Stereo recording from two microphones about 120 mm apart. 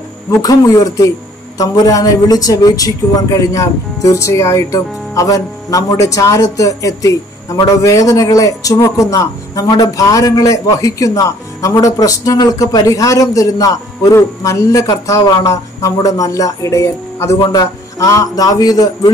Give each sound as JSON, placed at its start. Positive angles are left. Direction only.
{"t": 0.3, "sound": "a man's voice", "side_deg": 30}